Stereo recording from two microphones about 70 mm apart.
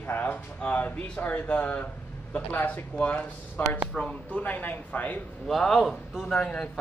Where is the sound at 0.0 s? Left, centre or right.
Left.